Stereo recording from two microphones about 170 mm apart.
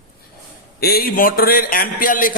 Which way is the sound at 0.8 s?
65° left (ahead or behind).